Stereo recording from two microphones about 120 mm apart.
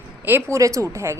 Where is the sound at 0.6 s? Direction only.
25° right (ahead or behind).